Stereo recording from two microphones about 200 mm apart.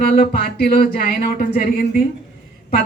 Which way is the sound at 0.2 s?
45° left (ahead or behind).